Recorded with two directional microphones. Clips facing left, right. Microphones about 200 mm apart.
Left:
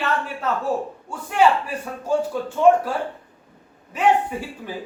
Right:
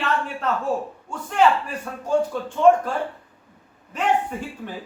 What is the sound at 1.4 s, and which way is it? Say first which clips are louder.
A man's voice: left 1 dB; 10° left (ahead or behind).